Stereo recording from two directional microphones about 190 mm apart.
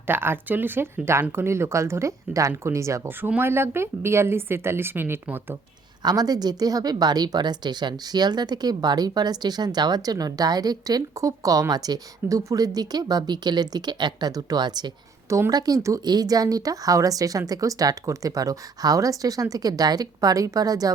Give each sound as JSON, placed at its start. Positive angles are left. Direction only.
{"t": 0.1, "sound": "a woman's voice", "side_deg": -10}